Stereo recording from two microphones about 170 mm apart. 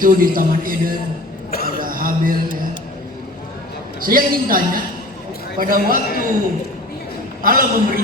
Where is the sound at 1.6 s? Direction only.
55° right (ahead or behind).